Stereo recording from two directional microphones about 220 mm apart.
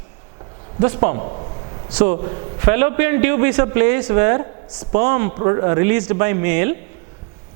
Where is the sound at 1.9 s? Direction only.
10° right (ahead or behind).